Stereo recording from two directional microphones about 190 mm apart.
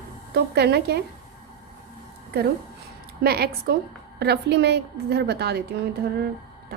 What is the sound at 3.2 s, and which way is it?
A woman's voice, 55° right (ahead or behind).